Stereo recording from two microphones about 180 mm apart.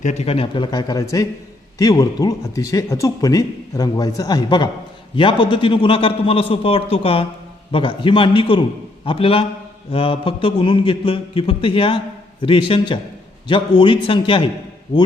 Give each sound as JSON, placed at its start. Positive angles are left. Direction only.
{"t": 0.0, "sound": "a man's voice", "side_deg": 35}